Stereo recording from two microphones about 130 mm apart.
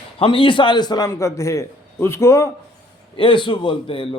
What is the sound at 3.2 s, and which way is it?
Speech, 40° left (ahead or behind).